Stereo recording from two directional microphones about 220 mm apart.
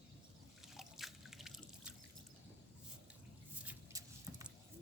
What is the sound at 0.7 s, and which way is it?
Drip, centre (ahead or behind).